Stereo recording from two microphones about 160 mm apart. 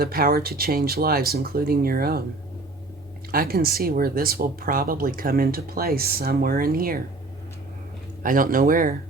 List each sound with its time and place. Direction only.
0.0 s speech: 70° right (ahead or behind)
3.3 s speech: 65° right (ahead or behind)
8.2 s speech: 60° right (ahead or behind)